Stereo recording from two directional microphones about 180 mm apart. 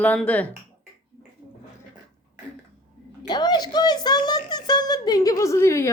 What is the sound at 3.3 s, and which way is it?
Speech, 25° left (ahead or behind).